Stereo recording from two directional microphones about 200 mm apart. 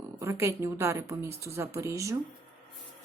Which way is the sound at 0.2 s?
15° right (ahead or behind).